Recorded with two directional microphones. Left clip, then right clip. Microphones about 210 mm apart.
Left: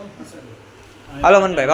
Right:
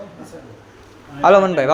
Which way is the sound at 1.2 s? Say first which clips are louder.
Right 1 dB; 15° right (ahead or behind).